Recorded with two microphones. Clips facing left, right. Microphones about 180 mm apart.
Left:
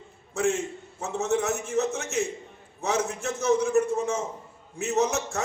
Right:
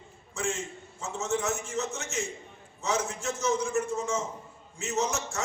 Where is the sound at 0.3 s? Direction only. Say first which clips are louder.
Left 7 dB; 60° left (ahead or behind).